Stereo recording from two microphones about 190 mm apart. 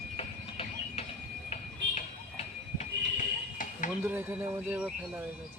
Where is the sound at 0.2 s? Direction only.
35° left (ahead or behind).